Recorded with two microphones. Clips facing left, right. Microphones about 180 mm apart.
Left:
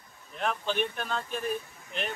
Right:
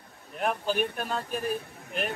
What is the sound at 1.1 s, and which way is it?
Speech, 40° right (ahead or behind).